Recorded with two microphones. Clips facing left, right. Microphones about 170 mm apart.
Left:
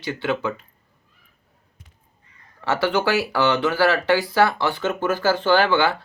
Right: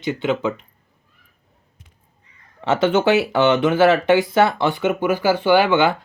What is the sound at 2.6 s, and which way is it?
Speech, 20° right (ahead or behind).